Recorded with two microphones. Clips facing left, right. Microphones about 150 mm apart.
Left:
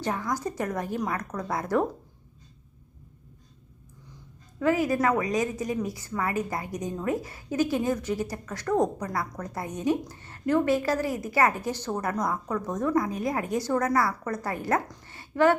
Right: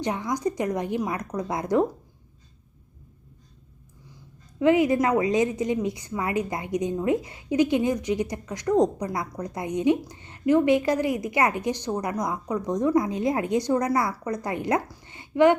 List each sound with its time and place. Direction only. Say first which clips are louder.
0.0 s a woman's voice: right 3 dB; 20° right (ahead or behind)
4.6 s a woman's voice: right 4 dB; 20° right (ahead or behind)
15.0 s a sound: right 4 dB; 20° right (ahead or behind)